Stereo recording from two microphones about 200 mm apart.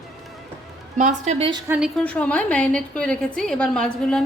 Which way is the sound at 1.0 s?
35° right (ahead or behind).